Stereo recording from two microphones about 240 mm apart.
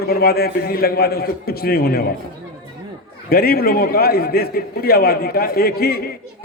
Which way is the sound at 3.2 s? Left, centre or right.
Left.